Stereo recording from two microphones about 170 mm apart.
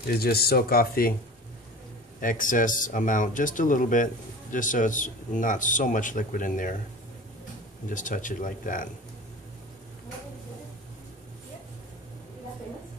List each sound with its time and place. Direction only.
0.1 s speech: 65° left (ahead or behind)
2.1 s speech: 50° left (ahead or behind)
7.9 s speech: 50° left (ahead or behind)